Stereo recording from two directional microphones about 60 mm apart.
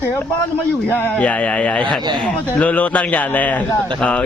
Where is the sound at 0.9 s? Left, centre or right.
Left.